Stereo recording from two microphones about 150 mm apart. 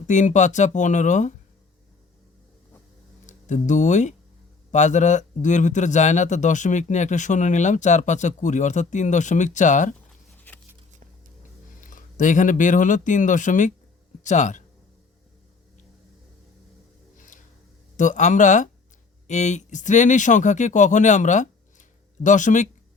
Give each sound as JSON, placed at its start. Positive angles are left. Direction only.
{"t": 0.1, "sound": "speech", "side_deg": 55}
{"t": 3.2, "sound": "speech", "side_deg": 55}
{"t": 10.3, "sound": "a sound", "side_deg": 10}
{"t": 11.8, "sound": "speech", "side_deg": 60}
{"t": 17.9, "sound": "speech", "side_deg": 55}